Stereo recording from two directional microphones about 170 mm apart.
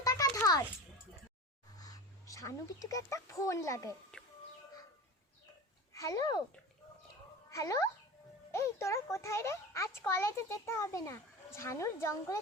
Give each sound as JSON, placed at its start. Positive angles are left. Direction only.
{"t": 0.0, "sound": "a sound", "side_deg": 20}
{"t": 1.8, "sound": "speech", "side_deg": 20}
{"t": 4.1, "sound": "music", "side_deg": 5}
{"t": 5.9, "sound": "a child's voice", "side_deg": 20}
{"t": 7.5, "sound": "a child's voice", "side_deg": 20}